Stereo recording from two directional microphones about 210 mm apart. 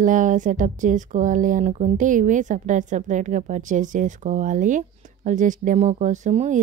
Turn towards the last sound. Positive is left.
turn(degrees=-35)  # may be behind; listen again after turning